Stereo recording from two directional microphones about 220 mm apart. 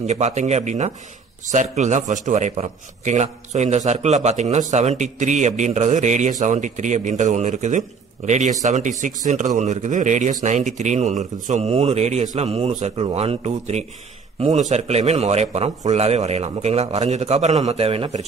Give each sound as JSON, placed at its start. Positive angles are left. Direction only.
{"t": 0.0, "sound": "a man's voice", "side_deg": -30}